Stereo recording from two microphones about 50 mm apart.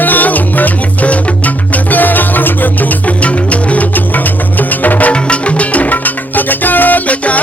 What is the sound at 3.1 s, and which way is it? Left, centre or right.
Music, left.